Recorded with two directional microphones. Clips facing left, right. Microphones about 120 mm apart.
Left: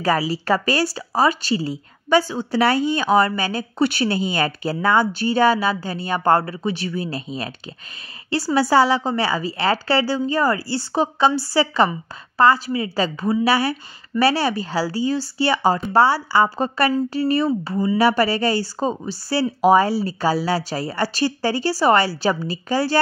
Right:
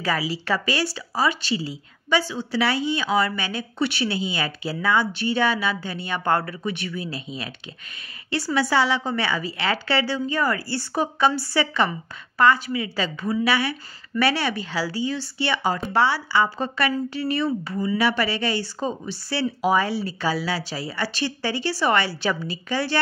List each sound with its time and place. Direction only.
0.0 s speech: 45° left (ahead or behind)
8.5 s speech: 40° left (ahead or behind)